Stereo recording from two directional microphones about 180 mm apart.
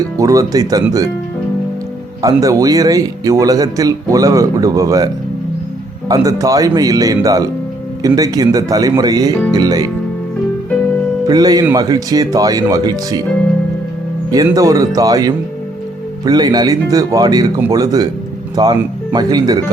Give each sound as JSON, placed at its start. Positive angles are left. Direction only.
{"t": 0.0, "sound": "a man's voice", "side_deg": -20}
{"t": 2.2, "sound": "a man's voice", "side_deg": -20}
{"t": 11.3, "sound": "a man's voice", "side_deg": -20}
{"t": 14.3, "sound": "a man's voice", "side_deg": -20}